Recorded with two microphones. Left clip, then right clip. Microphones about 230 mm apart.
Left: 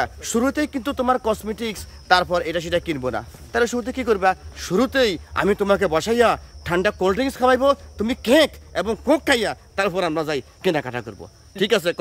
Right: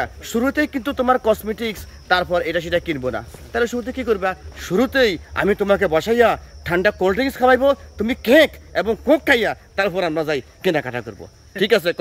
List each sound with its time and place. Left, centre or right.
0.0 s speech: centre